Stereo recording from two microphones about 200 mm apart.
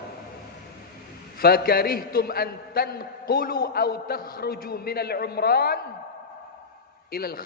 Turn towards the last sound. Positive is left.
turn(degrees=50)  # may be behind; listen again after turning